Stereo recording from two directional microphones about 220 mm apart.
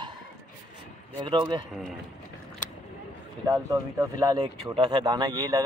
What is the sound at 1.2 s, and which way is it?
Speech, 20° right (ahead or behind).